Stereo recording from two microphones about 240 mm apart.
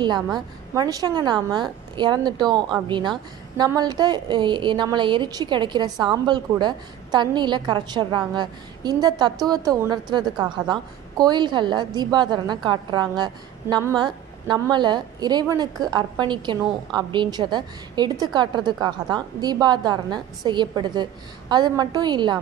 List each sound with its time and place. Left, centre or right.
0.7 s a woman's voice: centre